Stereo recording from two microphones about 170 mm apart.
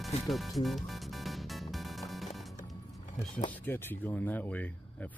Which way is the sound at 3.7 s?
10° left (ahead or behind).